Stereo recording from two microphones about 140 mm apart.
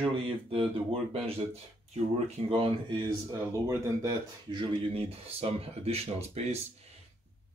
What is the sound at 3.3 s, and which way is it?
Speech, 25° right (ahead or behind).